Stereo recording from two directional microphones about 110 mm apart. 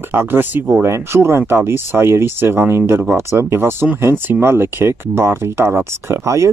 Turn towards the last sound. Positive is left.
turn(degrees=-25)  # may be behind; listen again after turning